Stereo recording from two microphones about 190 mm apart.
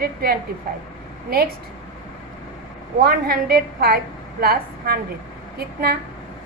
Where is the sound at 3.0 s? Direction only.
55° right (ahead or behind).